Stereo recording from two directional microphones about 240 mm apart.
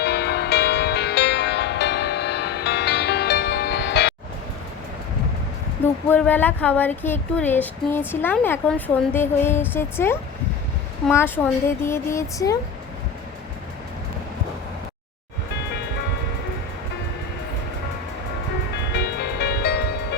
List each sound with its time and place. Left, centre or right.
0.0 s music: left
5.8 s speech: centre
18.9 s music: left